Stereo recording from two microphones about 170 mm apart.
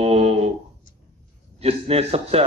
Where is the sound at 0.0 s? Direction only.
40° right (ahead or behind).